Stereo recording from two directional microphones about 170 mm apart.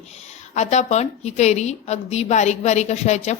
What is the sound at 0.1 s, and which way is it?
Speech, 40° left (ahead or behind).